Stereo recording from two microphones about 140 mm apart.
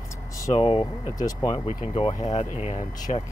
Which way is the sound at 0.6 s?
40° left (ahead or behind).